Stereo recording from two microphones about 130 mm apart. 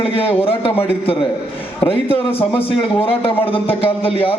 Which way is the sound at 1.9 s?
45° left (ahead or behind).